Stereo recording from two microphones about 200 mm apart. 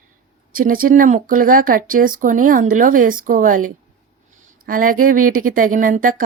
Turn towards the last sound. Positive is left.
turn(degrees=-45)  # may be behind; listen again after turning